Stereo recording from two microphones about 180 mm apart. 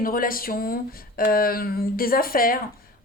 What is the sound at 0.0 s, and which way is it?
A woman's voice, 50° left (ahead or behind).